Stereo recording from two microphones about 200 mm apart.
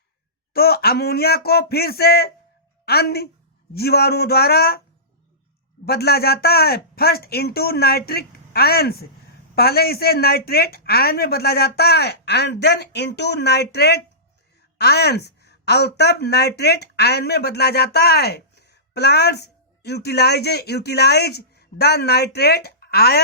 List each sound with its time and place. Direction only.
0.5 s speech: 50° left (ahead or behind)
5.8 s a woman's voice: 50° left (ahead or behind)